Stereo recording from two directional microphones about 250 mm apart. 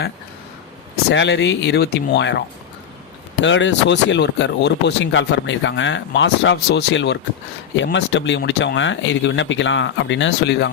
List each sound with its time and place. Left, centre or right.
1.1 s speech: left
3.4 s speech: left